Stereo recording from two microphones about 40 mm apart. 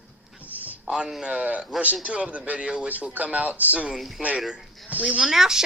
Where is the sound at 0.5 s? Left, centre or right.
Right.